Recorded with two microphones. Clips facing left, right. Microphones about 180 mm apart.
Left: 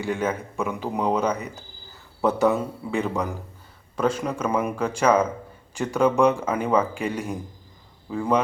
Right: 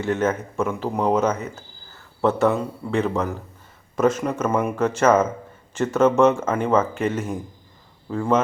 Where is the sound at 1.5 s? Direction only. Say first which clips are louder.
Right 3 dB; 15° left (ahead or behind).